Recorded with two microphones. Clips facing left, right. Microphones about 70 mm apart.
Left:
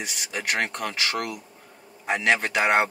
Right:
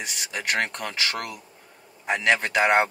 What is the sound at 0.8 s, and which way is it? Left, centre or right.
Speech, centre.